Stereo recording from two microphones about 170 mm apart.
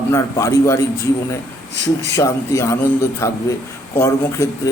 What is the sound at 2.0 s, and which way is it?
A man's voice, 15° left (ahead or behind).